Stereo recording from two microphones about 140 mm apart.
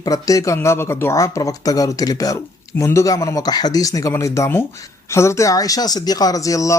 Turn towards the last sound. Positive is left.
turn(degrees=25)  # may be behind; listen again after turning